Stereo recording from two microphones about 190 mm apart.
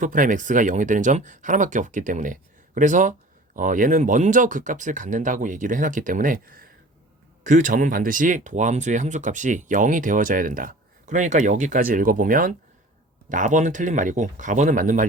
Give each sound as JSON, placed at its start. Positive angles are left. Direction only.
{"t": 0.0, "sound": "speech", "side_deg": -45}